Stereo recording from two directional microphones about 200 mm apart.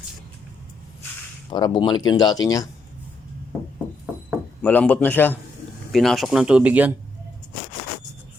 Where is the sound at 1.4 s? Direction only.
25° left (ahead or behind).